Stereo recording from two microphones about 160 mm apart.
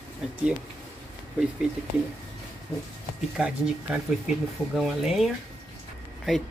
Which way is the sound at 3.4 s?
5° right (ahead or behind).